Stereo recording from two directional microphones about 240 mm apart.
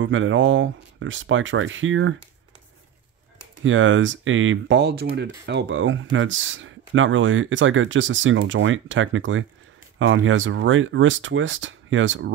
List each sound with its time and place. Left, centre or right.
0.0 s speech: right
3.6 s speech: right